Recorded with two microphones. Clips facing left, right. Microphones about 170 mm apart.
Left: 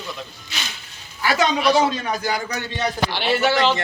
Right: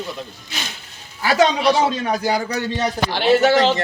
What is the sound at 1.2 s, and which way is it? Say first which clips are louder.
A man's voice: right 3 dB; 35° right (ahead or behind).